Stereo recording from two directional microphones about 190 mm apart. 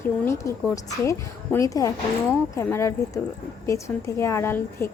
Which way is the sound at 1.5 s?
15° left (ahead or behind).